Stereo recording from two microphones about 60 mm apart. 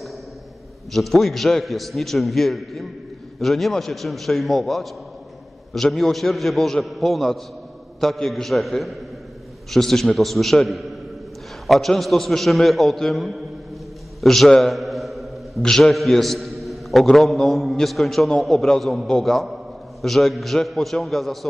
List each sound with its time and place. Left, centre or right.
0.9 s a man's voice: centre
14.2 s a sound: centre
15.6 s a man's voice: centre